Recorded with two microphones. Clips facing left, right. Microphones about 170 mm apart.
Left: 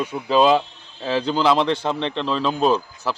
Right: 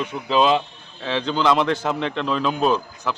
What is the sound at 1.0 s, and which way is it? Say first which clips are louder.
Speech: left 1 dB; 40° left (ahead or behind).